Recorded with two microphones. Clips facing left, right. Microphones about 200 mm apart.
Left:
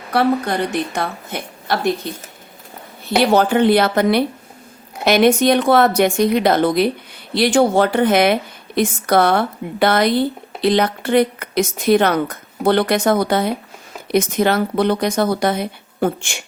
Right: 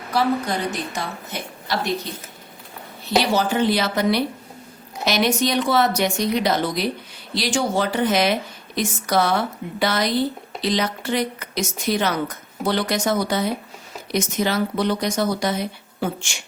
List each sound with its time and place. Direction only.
0.1 s speech: 60° left (ahead or behind)
3.2 s speech: 55° left (ahead or behind)